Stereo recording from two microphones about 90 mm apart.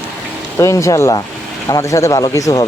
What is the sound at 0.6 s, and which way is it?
Speech, 35° left (ahead or behind).